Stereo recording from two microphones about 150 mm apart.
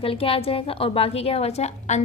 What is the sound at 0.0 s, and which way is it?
A woman's voice, 40° left (ahead or behind).